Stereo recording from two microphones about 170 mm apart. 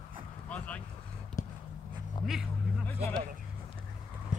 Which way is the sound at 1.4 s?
20° left (ahead or behind).